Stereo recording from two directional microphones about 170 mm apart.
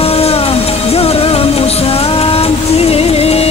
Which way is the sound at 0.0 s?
35° left (ahead or behind).